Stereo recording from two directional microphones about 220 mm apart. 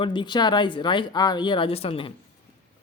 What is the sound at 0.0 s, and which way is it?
Speech, 20° left (ahead or behind).